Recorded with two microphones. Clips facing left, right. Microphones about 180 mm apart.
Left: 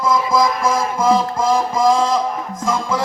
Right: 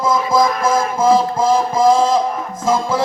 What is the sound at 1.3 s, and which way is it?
Music, 5° right (ahead or behind).